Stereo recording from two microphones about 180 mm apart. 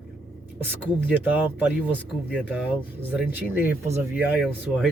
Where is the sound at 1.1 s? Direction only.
10° right (ahead or behind).